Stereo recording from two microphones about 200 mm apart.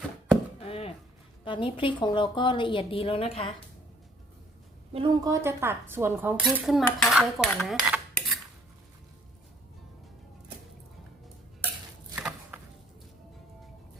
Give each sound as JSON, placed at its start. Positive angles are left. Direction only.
{"t": 0.6, "sound": "chopping", "side_deg": 30}
{"t": 1.5, "sound": "a woman's voice", "side_deg": 25}
{"t": 4.9, "sound": "a woman's voice", "side_deg": -30}
{"t": 5.2, "sound": "dishes", "side_deg": -15}
{"t": 12.1, "sound": "a sound", "side_deg": -5}